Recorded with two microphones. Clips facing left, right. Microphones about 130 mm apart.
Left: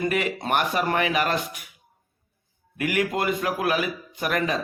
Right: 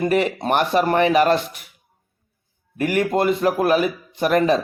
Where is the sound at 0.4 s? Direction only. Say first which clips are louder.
Right 5 dB; 30° right (ahead or behind).